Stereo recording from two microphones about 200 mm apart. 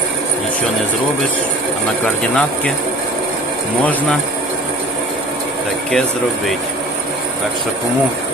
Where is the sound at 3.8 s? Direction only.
10° left (ahead or behind).